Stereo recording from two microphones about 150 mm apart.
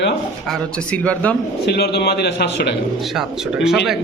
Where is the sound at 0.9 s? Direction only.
10° left (ahead or behind).